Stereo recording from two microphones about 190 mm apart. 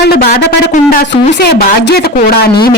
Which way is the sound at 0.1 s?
55° left (ahead or behind).